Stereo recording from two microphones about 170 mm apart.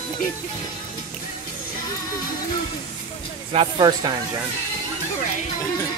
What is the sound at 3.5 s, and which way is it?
Speech, 30° right (ahead or behind).